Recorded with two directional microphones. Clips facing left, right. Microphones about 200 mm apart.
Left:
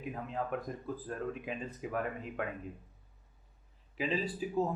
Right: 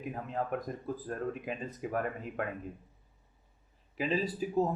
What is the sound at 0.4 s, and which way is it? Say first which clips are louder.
Speech: right 2 dB; 40° right (ahead or behind).